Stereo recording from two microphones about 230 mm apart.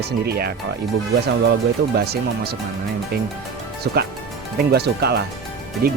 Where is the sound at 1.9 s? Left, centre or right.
Right.